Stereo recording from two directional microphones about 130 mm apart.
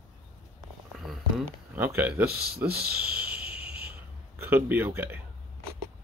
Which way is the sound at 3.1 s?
10° right (ahead or behind).